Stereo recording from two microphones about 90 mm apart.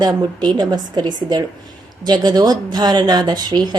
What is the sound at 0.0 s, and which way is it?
Speech, 50° right (ahead or behind).